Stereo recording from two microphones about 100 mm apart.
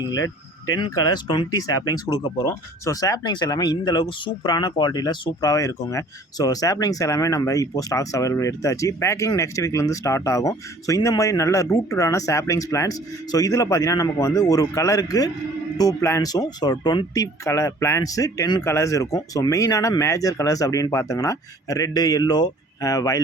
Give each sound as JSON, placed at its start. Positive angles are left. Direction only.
{"t": 0.9, "sound": "speech", "side_deg": 40}
{"t": 17.4, "sound": "speech", "side_deg": 35}